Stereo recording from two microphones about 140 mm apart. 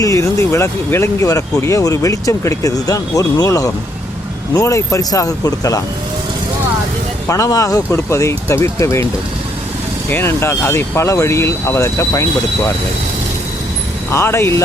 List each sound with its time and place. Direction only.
0.0 s speech: 20° left (ahead or behind)
7.3 s speech: 25° left (ahead or behind)
10.1 s speech: 20° left (ahead or behind)
14.1 s speech: 20° left (ahead or behind)